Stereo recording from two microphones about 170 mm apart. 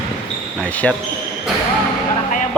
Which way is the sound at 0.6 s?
10° left (ahead or behind).